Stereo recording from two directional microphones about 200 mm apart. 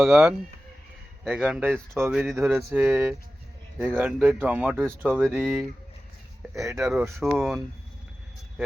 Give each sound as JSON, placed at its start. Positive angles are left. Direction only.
{"t": 0.0, "sound": "speech", "side_deg": 0}
{"t": 2.4, "sound": "speech", "side_deg": -10}
{"t": 6.5, "sound": "speech", "side_deg": -15}
{"t": 6.7, "sound": "speech", "side_deg": -5}